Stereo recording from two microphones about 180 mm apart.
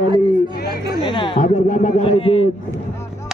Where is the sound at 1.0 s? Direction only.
25° left (ahead or behind).